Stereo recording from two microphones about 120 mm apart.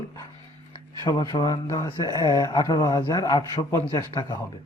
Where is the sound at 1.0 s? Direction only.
35° left (ahead or behind).